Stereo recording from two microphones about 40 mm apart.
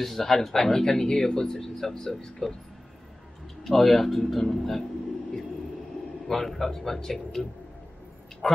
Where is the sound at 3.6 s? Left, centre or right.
Centre.